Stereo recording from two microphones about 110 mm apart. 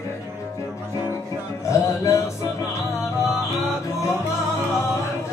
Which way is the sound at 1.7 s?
30° left (ahead or behind).